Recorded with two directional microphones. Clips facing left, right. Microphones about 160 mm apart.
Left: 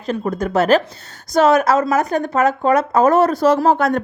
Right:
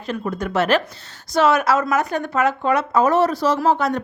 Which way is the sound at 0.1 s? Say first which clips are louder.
Left 4 dB; 40° left (ahead or behind).